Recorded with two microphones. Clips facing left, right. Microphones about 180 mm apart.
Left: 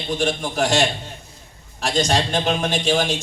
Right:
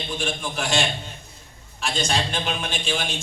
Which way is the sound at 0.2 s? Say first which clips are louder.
Left 8 dB; 40° left (ahead or behind).